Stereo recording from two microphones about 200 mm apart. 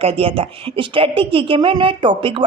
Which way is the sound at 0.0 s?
30° right (ahead or behind).